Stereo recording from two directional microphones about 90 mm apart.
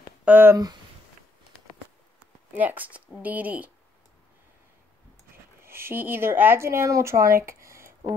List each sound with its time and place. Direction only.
0.2 s speech: 20° right (ahead or behind)
2.5 s speech: 20° right (ahead or behind)
5.6 s a woman's voice: 25° right (ahead or behind)